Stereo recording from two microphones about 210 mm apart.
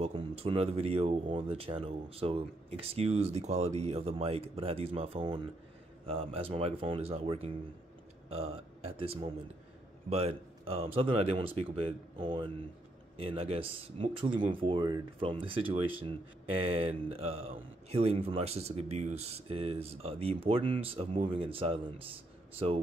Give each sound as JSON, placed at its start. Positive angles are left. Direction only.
{"t": 0.0, "sound": "a man's voice", "side_deg": -25}